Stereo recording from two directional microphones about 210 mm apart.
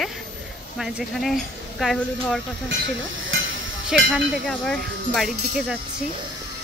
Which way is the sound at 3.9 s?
5° right (ahead or behind).